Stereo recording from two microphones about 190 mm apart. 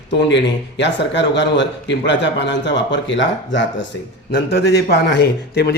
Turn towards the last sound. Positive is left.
turn(degrees=60)  # may be behind; listen again after turning